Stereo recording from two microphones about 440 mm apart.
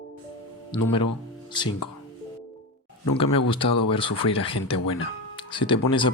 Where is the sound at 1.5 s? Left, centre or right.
Centre.